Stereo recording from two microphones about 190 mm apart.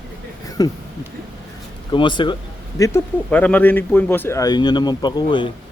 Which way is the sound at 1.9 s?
25° left (ahead or behind).